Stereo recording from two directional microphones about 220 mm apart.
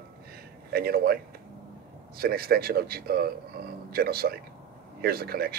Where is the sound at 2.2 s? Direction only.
45° right (ahead or behind).